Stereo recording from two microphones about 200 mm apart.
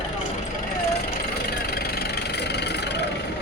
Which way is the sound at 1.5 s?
50° left (ahead or behind).